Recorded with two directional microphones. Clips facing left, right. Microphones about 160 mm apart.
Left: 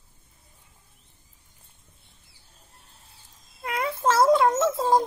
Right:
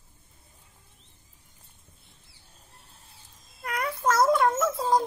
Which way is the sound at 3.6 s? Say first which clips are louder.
Left 3 dB; 25° left (ahead or behind).